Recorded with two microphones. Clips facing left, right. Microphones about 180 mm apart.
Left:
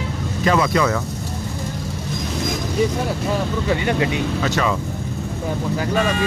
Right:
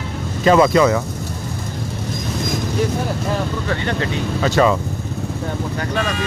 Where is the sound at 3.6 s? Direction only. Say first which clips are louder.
Left 2 dB; 15° left (ahead or behind).